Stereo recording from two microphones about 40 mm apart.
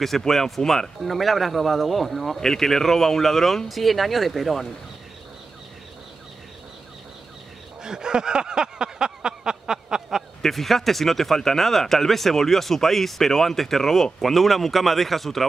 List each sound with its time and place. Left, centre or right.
0.3 s speech: centre
7.8 s a sound: centre
10.4 s speech: centre